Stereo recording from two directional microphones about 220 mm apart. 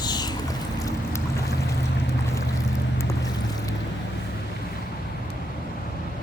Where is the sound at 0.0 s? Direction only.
20° left (ahead or behind).